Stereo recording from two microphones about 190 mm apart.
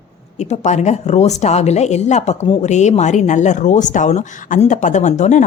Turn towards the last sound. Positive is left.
turn(degrees=40)  # may be behind; listen again after turning